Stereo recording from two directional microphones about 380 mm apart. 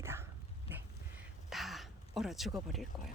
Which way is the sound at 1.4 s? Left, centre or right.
Centre.